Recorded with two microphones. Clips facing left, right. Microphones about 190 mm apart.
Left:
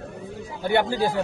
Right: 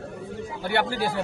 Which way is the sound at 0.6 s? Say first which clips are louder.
Left 4 dB; 15° left (ahead or behind).